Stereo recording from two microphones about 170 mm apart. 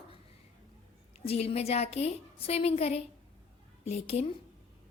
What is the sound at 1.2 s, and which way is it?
A woman's voice, 35° left (ahead or behind).